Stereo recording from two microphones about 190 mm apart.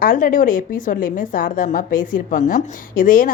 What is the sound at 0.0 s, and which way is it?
A woman's voice, 45° left (ahead or behind).